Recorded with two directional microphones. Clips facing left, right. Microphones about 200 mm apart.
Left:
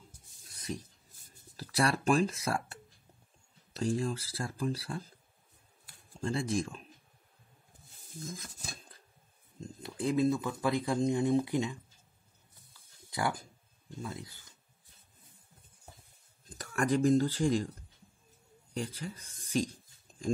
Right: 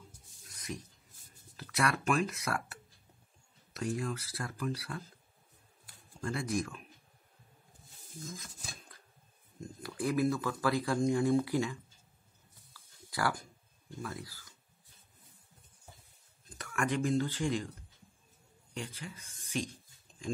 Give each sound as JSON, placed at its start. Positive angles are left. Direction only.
{"t": 0.5, "sound": "a sound", "side_deg": 30}
{"t": 1.6, "sound": "speech", "side_deg": 30}
{"t": 6.2, "sound": "speech", "side_deg": 25}
{"t": 9.6, "sound": "speech", "side_deg": 25}
{"t": 12.7, "sound": "a sound", "side_deg": 20}
{"t": 14.0, "sound": "speech", "side_deg": 20}
{"t": 16.4, "sound": "speech", "side_deg": 35}
{"t": 18.7, "sound": "speech", "side_deg": 40}